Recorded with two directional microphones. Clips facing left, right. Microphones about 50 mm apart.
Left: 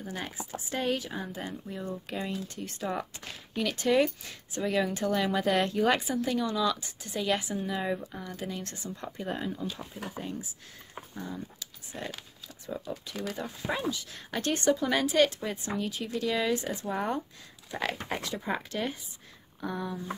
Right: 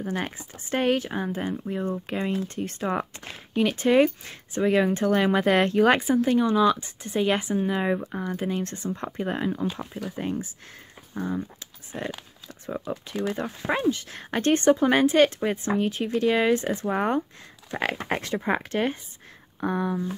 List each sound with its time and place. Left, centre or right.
0.0 s speech: right
11.1 s speech: right
13.4 s speech: right